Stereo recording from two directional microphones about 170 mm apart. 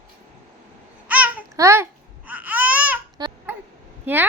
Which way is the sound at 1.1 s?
10° right (ahead or behind).